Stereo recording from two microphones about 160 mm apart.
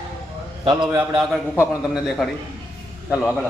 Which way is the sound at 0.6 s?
30° right (ahead or behind).